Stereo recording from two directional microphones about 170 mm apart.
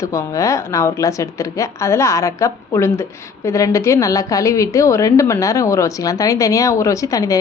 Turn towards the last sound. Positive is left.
turn(degrees=20)  # may be behind; listen again after turning